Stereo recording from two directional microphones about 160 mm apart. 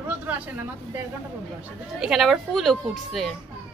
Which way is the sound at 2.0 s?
5° right (ahead or behind).